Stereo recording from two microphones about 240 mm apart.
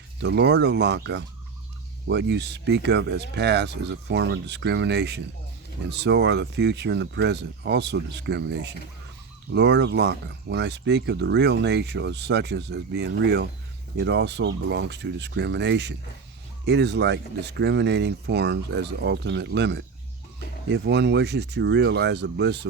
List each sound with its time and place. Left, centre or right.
0.2 s speech: right